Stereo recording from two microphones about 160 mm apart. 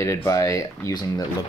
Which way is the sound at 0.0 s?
15° left (ahead or behind).